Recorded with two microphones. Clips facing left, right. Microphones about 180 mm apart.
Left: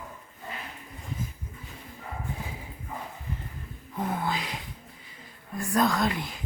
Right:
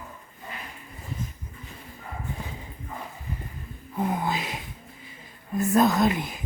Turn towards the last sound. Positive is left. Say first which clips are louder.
# right 5 dB
turn(degrees=-20)  # may be behind; listen again after turning